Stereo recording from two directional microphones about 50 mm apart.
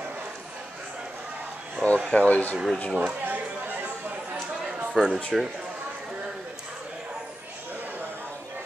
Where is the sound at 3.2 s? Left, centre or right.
Right.